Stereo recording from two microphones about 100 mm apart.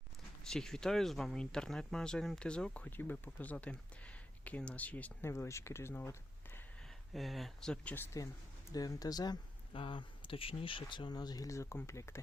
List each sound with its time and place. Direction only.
0.4 s speech: 5° left (ahead or behind)
5.3 s speech: 30° left (ahead or behind)
7.1 s speech: centre (ahead or behind)
7.9 s speech: 30° left (ahead or behind)
9.7 s speech: 60° left (ahead or behind); by 12.2 s 30° left (ahead or behind)